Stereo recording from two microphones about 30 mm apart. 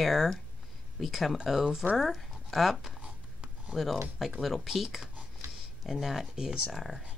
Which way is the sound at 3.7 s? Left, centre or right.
Centre.